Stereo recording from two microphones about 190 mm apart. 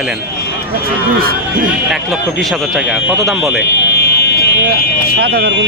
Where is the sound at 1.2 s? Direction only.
50° right (ahead or behind).